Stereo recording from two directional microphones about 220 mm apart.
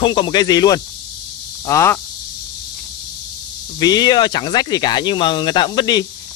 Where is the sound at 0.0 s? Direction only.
20° left (ahead or behind).